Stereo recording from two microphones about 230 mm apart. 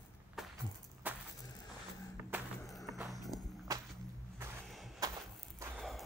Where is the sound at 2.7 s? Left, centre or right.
Centre.